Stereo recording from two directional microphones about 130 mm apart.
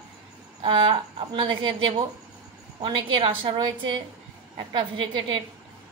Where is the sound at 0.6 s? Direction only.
40° right (ahead or behind).